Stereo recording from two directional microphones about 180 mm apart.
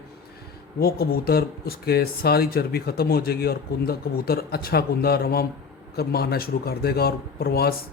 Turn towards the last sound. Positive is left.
turn(degrees=60)  # may be behind; listen again after turning